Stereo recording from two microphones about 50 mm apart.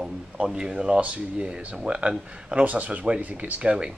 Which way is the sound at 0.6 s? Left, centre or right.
Centre.